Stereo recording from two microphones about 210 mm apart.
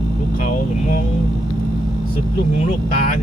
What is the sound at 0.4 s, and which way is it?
Vehicle, 40° left (ahead or behind).